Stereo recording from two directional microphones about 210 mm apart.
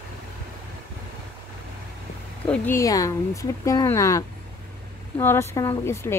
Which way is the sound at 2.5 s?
15° left (ahead or behind).